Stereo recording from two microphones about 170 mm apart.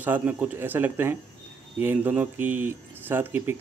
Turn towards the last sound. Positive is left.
turn(degrees=-10)  # may be behind; listen again after turning